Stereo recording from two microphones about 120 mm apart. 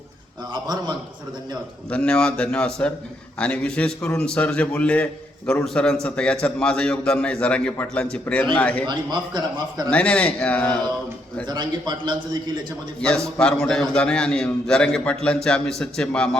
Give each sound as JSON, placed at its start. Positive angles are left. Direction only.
{"t": 1.9, "sound": "a man's voice", "side_deg": 10}
{"t": 8.9, "sound": "a man's voice", "side_deg": -35}
{"t": 9.9, "sound": "a man's voice", "side_deg": 10}
{"t": 11.4, "sound": "a man's voice", "side_deg": -35}
{"t": 13.4, "sound": "a man's voice", "side_deg": 5}